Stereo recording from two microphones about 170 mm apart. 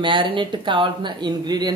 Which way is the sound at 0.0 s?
30° right (ahead or behind).